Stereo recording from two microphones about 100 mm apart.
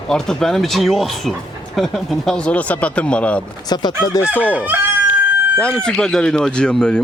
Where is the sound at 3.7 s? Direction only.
45° left (ahead or behind).